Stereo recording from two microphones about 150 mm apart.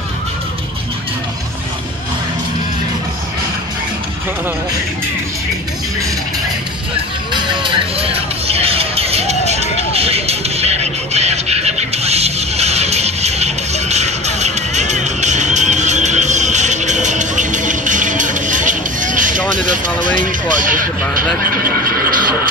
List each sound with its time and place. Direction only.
7.3 s music: 35° right (ahead or behind); by 19.3 s 60° right (ahead or behind)
19.5 s speech: 60° right (ahead or behind)
22.1 s music: 70° right (ahead or behind)